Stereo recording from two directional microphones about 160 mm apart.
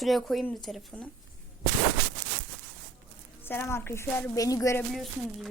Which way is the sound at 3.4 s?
15° left (ahead or behind).